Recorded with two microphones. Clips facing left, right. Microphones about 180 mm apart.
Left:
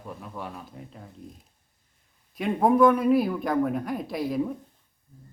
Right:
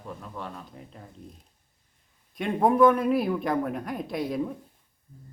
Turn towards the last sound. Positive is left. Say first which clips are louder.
# left 2 dB
turn(degrees=0)  # may be behind; listen again after turning